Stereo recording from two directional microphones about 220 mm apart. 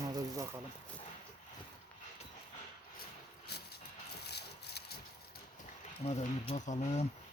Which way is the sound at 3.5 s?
50° left (ahead or behind).